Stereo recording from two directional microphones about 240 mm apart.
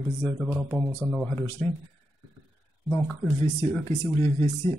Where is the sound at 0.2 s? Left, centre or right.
Centre.